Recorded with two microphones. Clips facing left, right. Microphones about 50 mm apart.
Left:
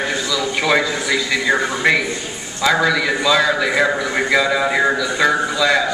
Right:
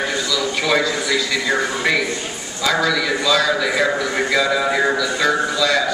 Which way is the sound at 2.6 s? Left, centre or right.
Centre.